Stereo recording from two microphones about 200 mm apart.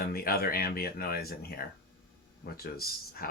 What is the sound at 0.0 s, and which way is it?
Speech, 50° left (ahead or behind).